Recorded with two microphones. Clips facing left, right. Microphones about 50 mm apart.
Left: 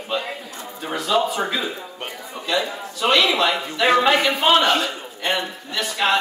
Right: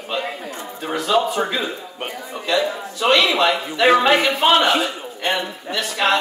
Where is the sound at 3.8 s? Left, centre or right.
Centre.